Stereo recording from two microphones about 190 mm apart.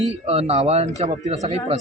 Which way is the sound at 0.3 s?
30° right (ahead or behind).